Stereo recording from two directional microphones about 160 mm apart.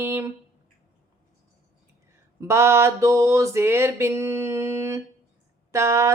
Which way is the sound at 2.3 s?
15° right (ahead or behind).